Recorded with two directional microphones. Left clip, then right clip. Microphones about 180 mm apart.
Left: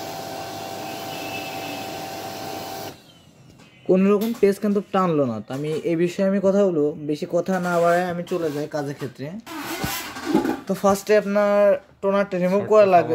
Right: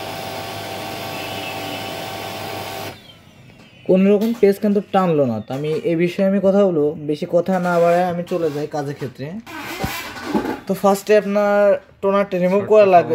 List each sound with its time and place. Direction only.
3.9 s speech: 5° right (ahead or behind)
10.3 s a sound: 30° left (ahead or behind)
10.7 s speech: 5° right (ahead or behind)